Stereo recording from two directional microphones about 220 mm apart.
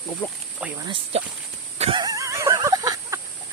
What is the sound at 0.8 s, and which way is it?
Speech, 20° right (ahead or behind).